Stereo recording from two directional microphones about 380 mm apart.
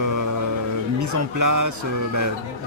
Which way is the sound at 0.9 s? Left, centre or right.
Right.